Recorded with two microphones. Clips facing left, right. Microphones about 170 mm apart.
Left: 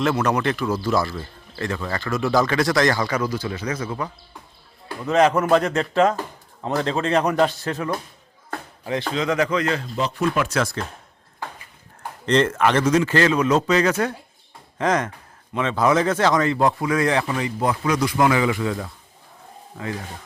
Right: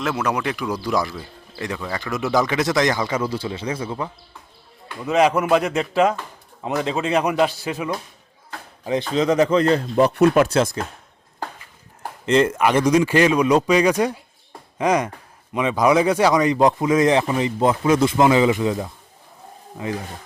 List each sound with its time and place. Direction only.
0.0 s a man's voice: 5° right (ahead or behind); by 3.9 s 25° right (ahead or behind)
5.0 s a man's voice: 5° right (ahead or behind); by 9.8 s 35° right (ahead or behind)
9.9 s speech: 60° right (ahead or behind)
10.5 s speech: 20° right (ahead or behind)
12.2 s a man's voice: 10° right (ahead or behind)